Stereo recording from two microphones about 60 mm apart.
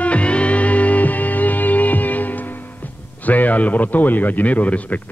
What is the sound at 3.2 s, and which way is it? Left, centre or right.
A man's voice, left.